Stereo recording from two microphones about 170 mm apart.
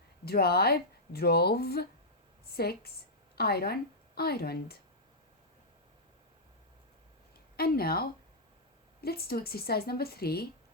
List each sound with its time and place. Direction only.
0.3 s a woman's voice: 65° left (ahead or behind)
7.5 s speech: 65° left (ahead or behind)